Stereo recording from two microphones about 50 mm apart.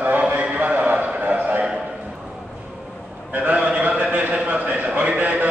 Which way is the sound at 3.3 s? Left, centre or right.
Right.